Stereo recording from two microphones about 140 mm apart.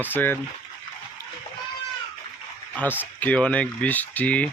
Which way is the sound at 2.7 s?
15° left (ahead or behind).